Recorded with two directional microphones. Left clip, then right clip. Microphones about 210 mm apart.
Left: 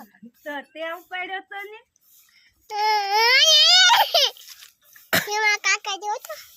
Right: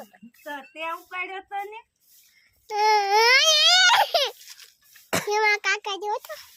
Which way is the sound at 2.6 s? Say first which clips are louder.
Right 1 dB; 15° right (ahead or behind).